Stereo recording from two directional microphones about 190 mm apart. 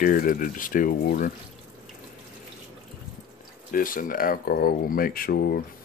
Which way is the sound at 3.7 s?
45° left (ahead or behind).